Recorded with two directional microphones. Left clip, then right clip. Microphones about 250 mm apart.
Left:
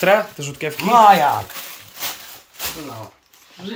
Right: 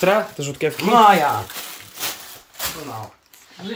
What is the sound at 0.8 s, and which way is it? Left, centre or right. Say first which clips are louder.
Speech: left 2 dB; left.